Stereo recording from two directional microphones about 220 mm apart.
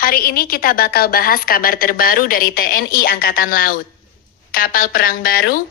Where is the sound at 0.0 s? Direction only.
40° left (ahead or behind).